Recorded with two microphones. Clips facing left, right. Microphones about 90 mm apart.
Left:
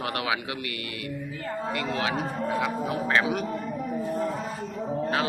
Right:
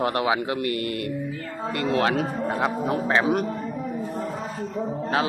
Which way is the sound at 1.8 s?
45° right (ahead or behind).